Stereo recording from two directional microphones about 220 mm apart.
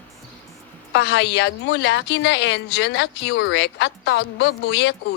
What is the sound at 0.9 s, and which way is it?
A woman's voice, 50° left (ahead or behind).